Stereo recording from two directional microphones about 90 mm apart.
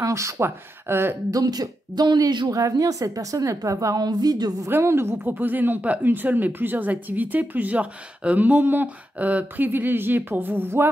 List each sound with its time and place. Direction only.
0.0 s a woman's voice: 35° right (ahead or behind)
1.3 s speech: 45° right (ahead or behind)
2.5 s a woman's voice: 40° right (ahead or behind)
4.6 s speech: 30° right (ahead or behind)